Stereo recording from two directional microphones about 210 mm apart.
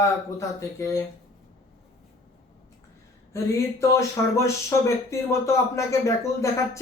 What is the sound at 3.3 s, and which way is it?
Speech, 15° left (ahead or behind).